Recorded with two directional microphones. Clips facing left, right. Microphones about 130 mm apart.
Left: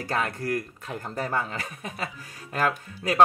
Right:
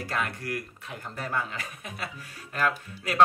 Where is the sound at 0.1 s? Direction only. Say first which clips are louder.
Left 5 dB; 35° left (ahead or behind).